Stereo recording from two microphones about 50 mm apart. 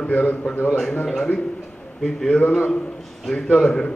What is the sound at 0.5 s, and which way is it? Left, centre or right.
Speech, left.